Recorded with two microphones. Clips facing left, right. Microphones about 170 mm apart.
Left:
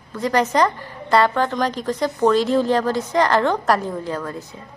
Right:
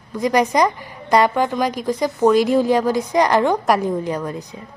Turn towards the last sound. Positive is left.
turn(degrees=-15)  # may be behind; listen again after turning